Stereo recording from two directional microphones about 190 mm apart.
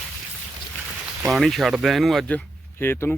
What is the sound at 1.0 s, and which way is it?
Speech, centre (ahead or behind).